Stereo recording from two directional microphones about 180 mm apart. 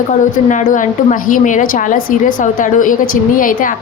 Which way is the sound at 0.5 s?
45° left (ahead or behind).